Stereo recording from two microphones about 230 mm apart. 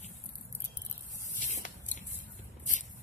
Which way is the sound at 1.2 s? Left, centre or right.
Left.